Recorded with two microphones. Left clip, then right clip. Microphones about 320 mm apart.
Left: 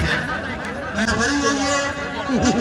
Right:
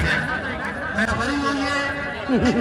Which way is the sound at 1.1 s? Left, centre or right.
Left.